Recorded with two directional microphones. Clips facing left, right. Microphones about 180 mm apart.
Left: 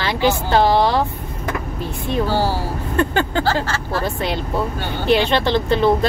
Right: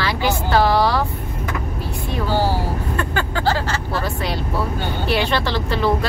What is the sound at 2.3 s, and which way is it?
Speech, 15° right (ahead or behind).